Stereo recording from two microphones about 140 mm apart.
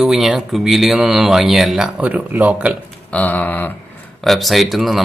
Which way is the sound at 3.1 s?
10° left (ahead or behind).